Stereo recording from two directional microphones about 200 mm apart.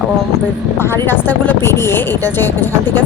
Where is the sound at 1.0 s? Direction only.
10° left (ahead or behind).